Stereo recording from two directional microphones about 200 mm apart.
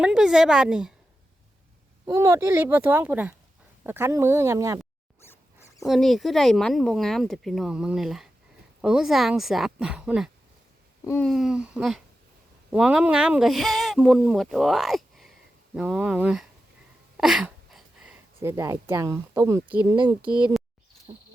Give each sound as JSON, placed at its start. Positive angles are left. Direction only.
{"t": 0.0, "sound": "a woman's voice", "side_deg": -5}
{"t": 2.0, "sound": "speech", "side_deg": -15}
{"t": 5.8, "sound": "speech", "side_deg": 0}